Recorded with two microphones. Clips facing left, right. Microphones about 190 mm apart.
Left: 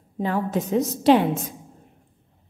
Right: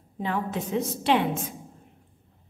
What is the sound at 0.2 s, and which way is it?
A woman's voice, 40° left (ahead or behind).